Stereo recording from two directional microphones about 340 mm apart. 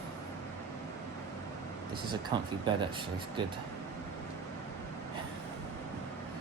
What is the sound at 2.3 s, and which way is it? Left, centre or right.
Speech, centre.